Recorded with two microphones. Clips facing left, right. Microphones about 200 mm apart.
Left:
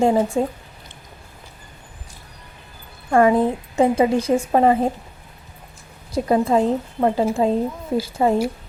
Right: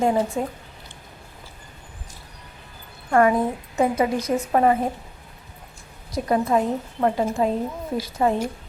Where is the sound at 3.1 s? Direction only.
25° left (ahead or behind).